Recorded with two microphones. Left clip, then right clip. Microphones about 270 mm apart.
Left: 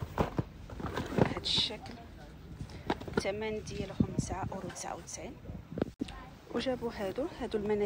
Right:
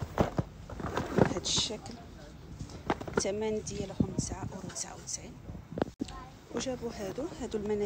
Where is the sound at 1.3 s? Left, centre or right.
Centre.